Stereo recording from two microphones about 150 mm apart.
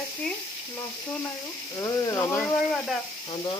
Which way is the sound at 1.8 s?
20° left (ahead or behind).